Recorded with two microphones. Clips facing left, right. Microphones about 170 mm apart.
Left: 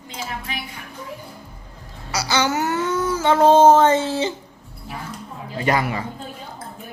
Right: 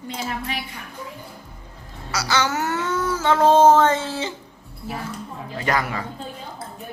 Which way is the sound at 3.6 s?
20° left (ahead or behind).